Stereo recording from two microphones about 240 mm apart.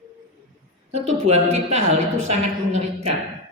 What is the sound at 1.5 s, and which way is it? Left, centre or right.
A man's voice, right.